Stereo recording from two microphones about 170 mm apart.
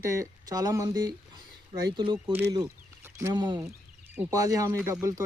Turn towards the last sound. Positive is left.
turn(degrees=-20)  # may be behind; listen again after turning